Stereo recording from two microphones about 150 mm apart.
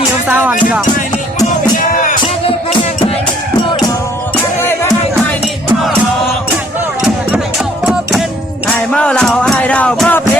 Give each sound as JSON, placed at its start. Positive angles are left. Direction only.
{"t": 0.3, "sound": "speech", "side_deg": -10}
{"t": 1.7, "sound": "music", "side_deg": 65}
{"t": 8.7, "sound": "music", "side_deg": 5}